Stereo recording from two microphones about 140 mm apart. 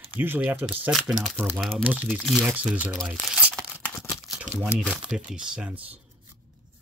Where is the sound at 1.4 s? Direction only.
15° right (ahead or behind).